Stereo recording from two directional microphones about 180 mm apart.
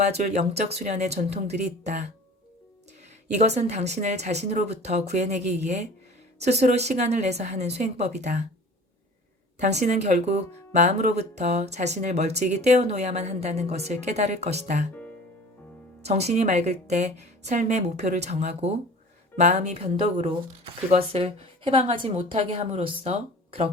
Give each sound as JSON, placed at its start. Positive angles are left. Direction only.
{"t": 0.0, "sound": "speech", "side_deg": -40}
{"t": 3.3, "sound": "speech", "side_deg": -40}
{"t": 9.6, "sound": "speech", "side_deg": -40}
{"t": 16.0, "sound": "speech", "side_deg": -35}